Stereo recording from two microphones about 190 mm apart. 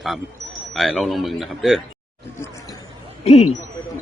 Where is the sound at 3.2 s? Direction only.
35° left (ahead or behind).